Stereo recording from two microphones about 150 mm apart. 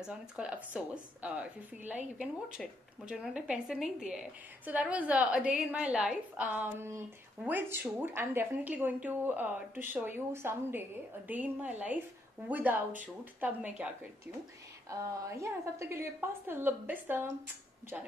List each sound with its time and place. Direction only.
0.0 s speech: 5° right (ahead or behind)
14.9 s speech: 20° right (ahead or behind)